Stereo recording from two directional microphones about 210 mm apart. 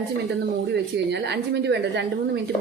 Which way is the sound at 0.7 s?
55° right (ahead or behind).